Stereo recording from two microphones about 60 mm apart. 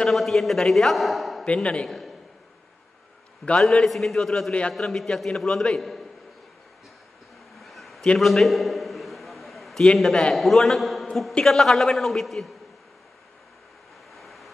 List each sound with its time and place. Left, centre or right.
0.0 s a man's voice: centre
1.4 s speech: centre
1.9 s a man's voice: centre
3.5 s a man's voice: centre
4.5 s speech: centre
4.7 s a man's voice: centre
7.5 s a sound: centre
10.3 s a man's voice: centre
14.1 s vehicle: centre